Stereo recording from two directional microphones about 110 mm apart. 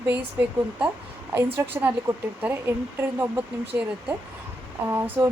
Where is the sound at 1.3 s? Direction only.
20° right (ahead or behind).